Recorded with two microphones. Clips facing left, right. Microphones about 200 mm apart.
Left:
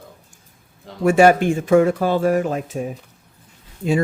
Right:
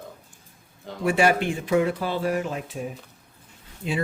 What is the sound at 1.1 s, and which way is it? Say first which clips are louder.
Speech: left 8 dB; 45° left (ahead or behind).